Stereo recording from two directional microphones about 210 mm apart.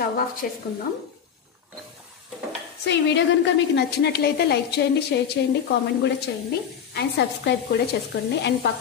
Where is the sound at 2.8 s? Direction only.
55° left (ahead or behind).